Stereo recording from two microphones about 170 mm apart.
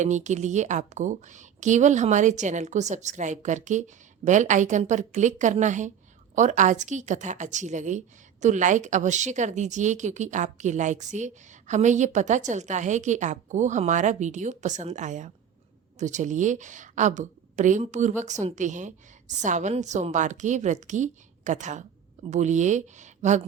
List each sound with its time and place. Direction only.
0.0 s a woman's voice: 45° right (ahead or behind)